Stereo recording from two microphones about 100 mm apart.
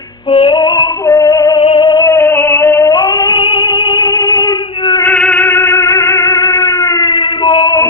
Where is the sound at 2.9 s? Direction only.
45° left (ahead or behind).